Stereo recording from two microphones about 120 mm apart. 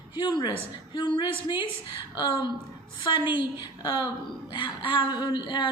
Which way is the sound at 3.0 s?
40° left (ahead or behind).